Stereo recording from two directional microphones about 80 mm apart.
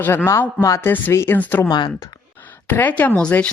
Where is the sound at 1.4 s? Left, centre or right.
Left.